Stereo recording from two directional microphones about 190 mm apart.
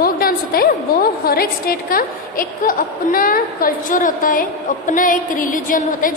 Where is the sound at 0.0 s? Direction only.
50° left (ahead or behind).